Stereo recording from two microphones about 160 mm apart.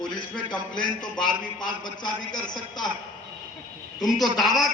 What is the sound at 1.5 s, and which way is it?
A man's voice, 25° left (ahead or behind).